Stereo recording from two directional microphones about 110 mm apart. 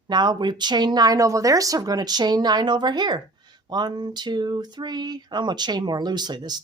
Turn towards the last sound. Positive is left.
turn(degrees=-40)  # may be behind; listen again after turning